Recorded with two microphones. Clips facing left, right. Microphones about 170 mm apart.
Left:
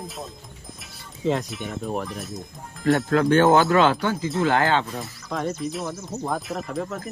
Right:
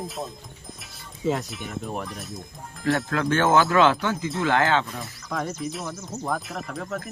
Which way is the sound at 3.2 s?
40° left (ahead or behind).